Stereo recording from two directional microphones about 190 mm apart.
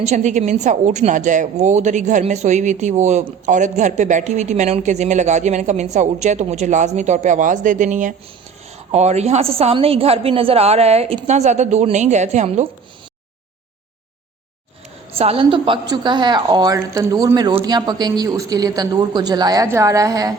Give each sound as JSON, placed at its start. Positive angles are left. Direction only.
{"t": 0.0, "sound": "a woman's voice", "side_deg": -35}
{"t": 15.1, "sound": "a woman's voice", "side_deg": -30}